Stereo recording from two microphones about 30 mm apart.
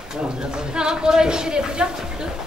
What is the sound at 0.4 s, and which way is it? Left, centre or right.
A woman's voice, right.